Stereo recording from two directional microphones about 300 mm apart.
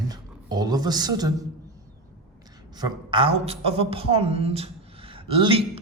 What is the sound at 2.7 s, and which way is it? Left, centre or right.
A woman's voice, centre.